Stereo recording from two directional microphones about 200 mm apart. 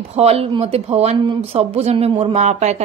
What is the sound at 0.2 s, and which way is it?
Speech, 30° right (ahead or behind).